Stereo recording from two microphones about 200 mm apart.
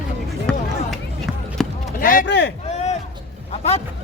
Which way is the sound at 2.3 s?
60° left (ahead or behind).